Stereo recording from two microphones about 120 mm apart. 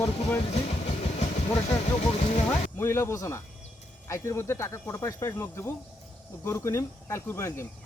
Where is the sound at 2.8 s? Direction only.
20° left (ahead or behind).